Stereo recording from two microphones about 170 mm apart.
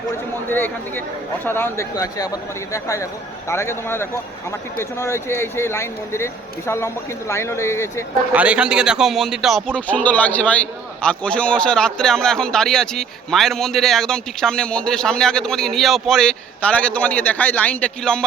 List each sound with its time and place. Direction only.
0.5 s speech: 10° left (ahead or behind)
8.3 s a man's voice: 10° right (ahead or behind)